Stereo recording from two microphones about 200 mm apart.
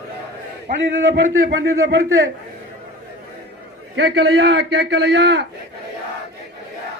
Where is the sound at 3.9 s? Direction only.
60° right (ahead or behind).